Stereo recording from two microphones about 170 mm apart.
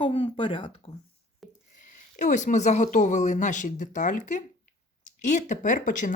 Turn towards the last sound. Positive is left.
turn(degrees=50)  # may be behind; listen again after turning